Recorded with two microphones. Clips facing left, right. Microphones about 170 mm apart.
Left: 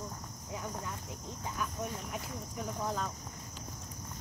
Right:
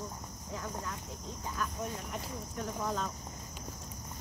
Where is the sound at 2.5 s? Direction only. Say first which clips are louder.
Right 1 dB; 5° left (ahead or behind).